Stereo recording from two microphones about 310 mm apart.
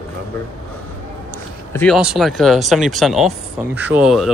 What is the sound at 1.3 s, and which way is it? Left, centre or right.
Speech, centre.